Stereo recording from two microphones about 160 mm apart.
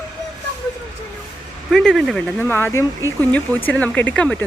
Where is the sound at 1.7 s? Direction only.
Centre (ahead or behind).